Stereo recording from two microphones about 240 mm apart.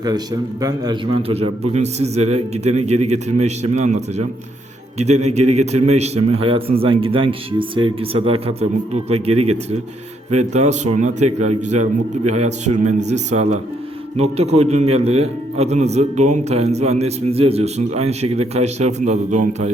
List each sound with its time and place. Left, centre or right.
0.6 s a man's voice: right
5.3 s a man's voice: right